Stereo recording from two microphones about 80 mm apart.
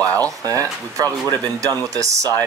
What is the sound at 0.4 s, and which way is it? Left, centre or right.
Speech, right.